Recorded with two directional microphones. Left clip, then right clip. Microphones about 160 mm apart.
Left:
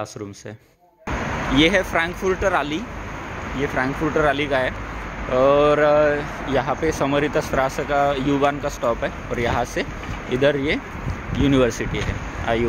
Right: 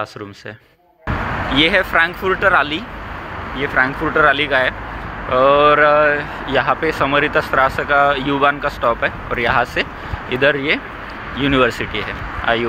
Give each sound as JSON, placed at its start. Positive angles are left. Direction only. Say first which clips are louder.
{"t": 1.5, "sound": "speech", "louder": "right 3 dB", "side_deg": 20}
{"t": 6.4, "sound": "speech", "louder": "right 5 dB", "side_deg": 20}